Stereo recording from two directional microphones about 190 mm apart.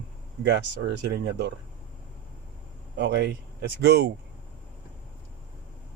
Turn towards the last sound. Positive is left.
turn(degrees=-60)  # may be behind; listen again after turning